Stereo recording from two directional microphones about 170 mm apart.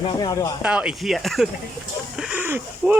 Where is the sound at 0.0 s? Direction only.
25° left (ahead or behind).